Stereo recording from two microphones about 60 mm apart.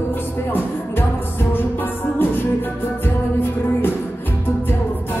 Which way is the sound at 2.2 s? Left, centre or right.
Left.